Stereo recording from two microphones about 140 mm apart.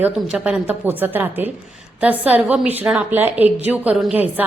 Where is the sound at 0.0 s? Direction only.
10° right (ahead or behind).